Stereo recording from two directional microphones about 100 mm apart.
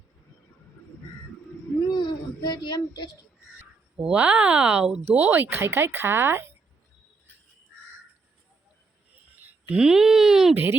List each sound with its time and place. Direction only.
1.9 s a sound: 50° left (ahead or behind)
4.0 s speech: 15° right (ahead or behind)
5.1 s speech: 20° right (ahead or behind)
9.4 s speech: 10° right (ahead or behind)
10.5 s speech: 20° right (ahead or behind)